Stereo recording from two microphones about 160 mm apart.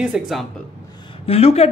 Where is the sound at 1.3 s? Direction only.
40° left (ahead or behind).